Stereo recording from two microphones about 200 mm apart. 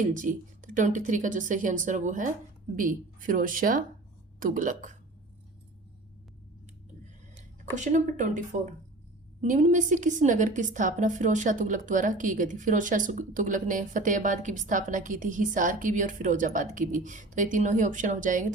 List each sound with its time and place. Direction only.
0.0 s a woman's voice: 40° right (ahead or behind)
7.3 s a woman's voice: 35° right (ahead or behind)